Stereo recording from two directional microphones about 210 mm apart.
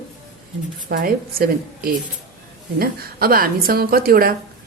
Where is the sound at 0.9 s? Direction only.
45° right (ahead or behind).